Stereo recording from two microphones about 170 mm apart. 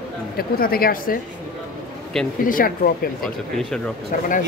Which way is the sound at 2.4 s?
55° left (ahead or behind).